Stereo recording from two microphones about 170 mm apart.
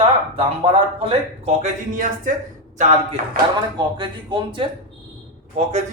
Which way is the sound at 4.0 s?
30° right (ahead or behind).